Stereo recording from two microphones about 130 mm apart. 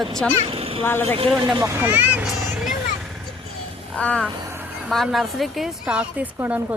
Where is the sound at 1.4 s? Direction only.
30° right (ahead or behind).